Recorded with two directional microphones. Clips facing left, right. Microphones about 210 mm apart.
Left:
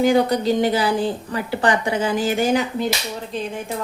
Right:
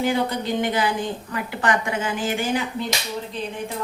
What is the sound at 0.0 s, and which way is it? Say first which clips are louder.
A woman's voice: left 6 dB; 40° left (ahead or behind).